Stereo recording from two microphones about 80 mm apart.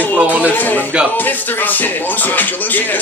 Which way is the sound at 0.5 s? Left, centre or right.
Left.